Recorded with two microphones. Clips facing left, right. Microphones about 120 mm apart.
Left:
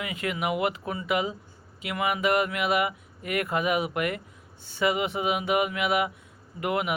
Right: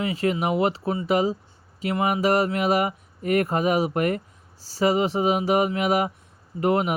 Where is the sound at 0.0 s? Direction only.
35° right (ahead or behind).